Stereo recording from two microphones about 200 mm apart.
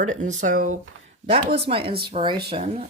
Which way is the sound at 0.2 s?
35° right (ahead or behind).